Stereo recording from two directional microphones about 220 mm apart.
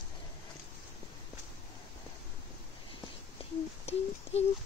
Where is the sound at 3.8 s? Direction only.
30° left (ahead or behind).